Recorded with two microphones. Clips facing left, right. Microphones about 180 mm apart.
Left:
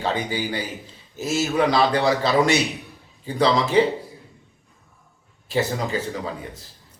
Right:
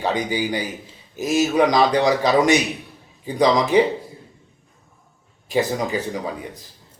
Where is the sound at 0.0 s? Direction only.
15° right (ahead or behind).